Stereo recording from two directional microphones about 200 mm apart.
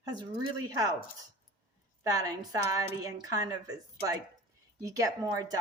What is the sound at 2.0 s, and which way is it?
A woman's voice, 20° right (ahead or behind).